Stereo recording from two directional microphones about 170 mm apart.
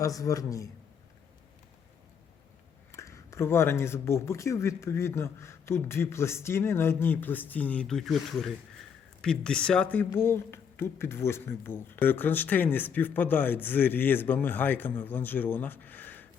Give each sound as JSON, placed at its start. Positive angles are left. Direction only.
{"t": 0.2, "sound": "a man's voice", "side_deg": 20}
{"t": 2.9, "sound": "speech", "side_deg": 15}